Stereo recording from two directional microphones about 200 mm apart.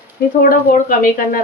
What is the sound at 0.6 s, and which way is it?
Speech, 45° left (ahead or behind).